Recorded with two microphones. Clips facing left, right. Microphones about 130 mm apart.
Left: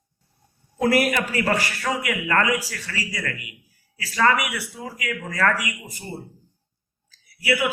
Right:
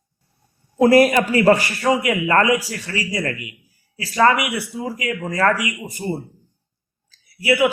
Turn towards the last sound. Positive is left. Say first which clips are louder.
# right 6 dB
turn(degrees=-25)  # may be behind; listen again after turning